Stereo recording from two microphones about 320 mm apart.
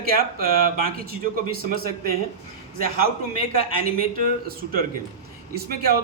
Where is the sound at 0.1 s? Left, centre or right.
Right.